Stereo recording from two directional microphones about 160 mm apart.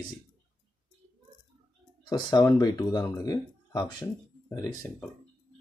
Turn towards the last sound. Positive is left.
turn(degrees=20)  # may be behind; listen again after turning